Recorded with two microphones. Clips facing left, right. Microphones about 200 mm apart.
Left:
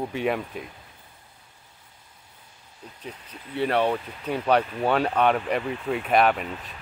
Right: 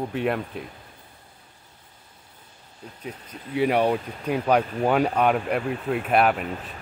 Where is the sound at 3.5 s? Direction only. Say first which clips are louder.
Right 2 dB; 10° right (ahead or behind).